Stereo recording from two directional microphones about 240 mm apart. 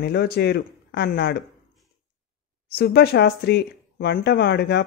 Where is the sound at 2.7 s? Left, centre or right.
Left.